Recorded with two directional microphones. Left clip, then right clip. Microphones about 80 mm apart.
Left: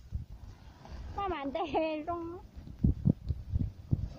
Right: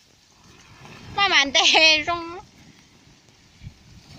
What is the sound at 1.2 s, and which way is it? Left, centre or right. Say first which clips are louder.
Speech: right 17 dB; right.